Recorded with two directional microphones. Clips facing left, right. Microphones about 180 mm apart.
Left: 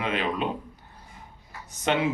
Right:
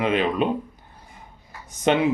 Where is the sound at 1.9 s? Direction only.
20° right (ahead or behind).